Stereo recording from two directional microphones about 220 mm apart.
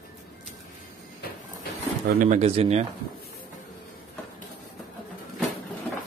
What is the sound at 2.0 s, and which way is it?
Speech, 35° right (ahead or behind).